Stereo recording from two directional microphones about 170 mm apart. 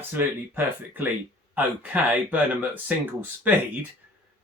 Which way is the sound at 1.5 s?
10° right (ahead or behind).